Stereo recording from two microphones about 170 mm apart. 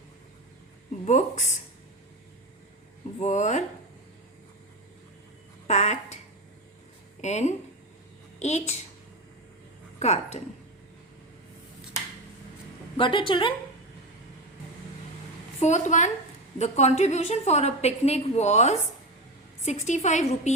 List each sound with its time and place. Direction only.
1.0 s a woman's voice: 45° left (ahead or behind)
3.2 s a woman's voice: 45° left (ahead or behind)
5.6 s speech: 45° left (ahead or behind)
7.2 s a woman's voice: 45° left (ahead or behind)
10.0 s a woman's voice: 40° left (ahead or behind)
13.0 s a woman's voice: 30° left (ahead or behind)
15.6 s a woman's voice: 45° left (ahead or behind)